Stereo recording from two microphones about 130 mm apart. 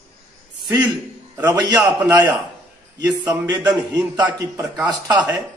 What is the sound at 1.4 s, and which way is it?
Speech, 30° right (ahead or behind).